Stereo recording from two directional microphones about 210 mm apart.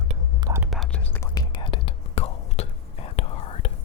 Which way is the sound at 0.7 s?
Centre (ahead or behind).